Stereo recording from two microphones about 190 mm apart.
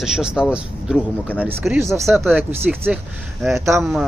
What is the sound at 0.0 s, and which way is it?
Speech, 5° right (ahead or behind).